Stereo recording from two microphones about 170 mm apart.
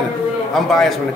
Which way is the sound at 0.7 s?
Centre (ahead or behind).